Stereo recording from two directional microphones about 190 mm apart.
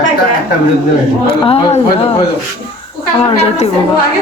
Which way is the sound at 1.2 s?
30° left (ahead or behind).